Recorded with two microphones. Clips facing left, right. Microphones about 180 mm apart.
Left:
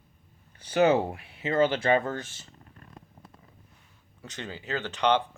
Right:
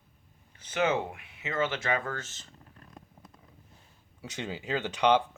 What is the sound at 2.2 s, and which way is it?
Speech, 10° left (ahead or behind).